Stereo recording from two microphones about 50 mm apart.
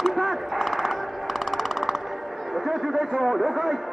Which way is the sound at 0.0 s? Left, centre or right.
Centre.